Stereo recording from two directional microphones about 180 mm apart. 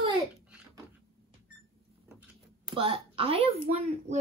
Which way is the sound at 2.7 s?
30° right (ahead or behind).